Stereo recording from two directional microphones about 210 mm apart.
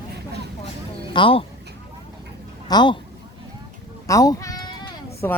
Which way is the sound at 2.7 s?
20° left (ahead or behind).